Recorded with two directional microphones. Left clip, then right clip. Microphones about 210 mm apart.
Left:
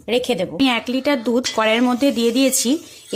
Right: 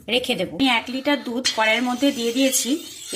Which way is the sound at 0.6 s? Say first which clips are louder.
Left 1 dB; 45° left (ahead or behind).